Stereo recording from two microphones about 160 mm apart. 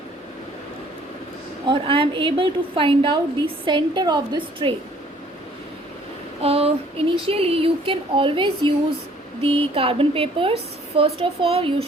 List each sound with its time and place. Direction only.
1.6 s a woman's voice: 30° right (ahead or behind)
6.4 s child singing: 40° right (ahead or behind)
7.3 s a woman's voice: 35° right (ahead or behind)